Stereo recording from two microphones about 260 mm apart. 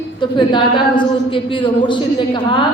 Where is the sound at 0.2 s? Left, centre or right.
Centre.